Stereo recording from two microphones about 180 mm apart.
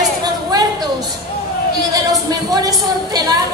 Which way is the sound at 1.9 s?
20° right (ahead or behind).